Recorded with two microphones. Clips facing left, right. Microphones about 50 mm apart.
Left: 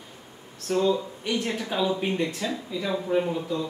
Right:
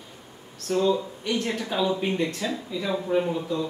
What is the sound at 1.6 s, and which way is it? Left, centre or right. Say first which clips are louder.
Speech: right 1 dB; centre.